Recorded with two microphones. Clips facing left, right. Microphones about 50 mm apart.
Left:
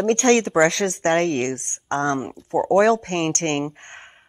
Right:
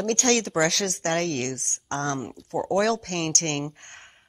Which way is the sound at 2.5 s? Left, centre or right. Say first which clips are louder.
Left 7 dB; centre.